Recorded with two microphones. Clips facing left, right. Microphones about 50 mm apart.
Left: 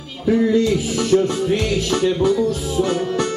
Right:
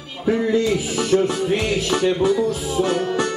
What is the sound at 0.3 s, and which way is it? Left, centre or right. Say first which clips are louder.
Music: left 2 dB; centre.